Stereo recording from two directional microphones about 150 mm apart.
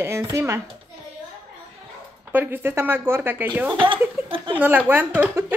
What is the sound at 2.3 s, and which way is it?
A woman's voice, 10° right (ahead or behind).